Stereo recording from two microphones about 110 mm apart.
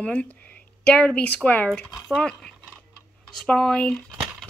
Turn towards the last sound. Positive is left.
turn(degrees=5)  # may be behind; listen again after turning